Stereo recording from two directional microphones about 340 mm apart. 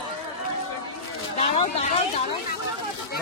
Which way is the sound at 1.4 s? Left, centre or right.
Centre.